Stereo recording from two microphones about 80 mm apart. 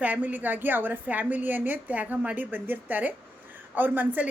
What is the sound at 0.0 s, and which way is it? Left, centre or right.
A woman's voice, right.